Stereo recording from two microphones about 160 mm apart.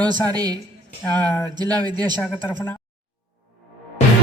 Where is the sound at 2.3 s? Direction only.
15° left (ahead or behind).